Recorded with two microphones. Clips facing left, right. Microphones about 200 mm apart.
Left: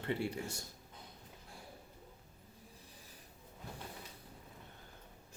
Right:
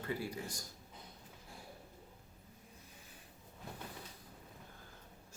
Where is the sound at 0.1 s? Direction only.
25° left (ahead or behind).